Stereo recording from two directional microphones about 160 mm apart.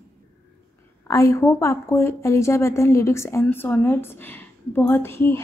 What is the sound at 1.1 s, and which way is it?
A woman's voice, 20° left (ahead or behind).